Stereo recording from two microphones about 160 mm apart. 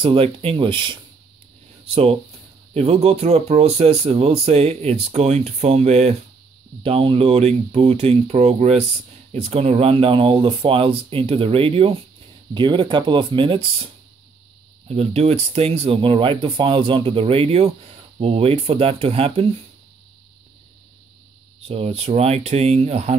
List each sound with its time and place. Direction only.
0.0 s speech: 35° right (ahead or behind)
14.9 s speech: 40° right (ahead or behind)
21.5 s speech: 40° right (ahead or behind)